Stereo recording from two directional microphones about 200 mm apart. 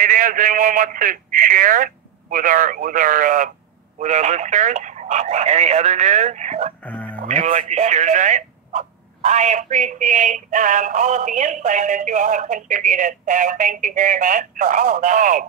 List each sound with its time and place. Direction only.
0.0 s a man's voice: 45° right (ahead or behind)
6.8 s speech: 5° left (ahead or behind)
7.2 s speech: 35° right (ahead or behind)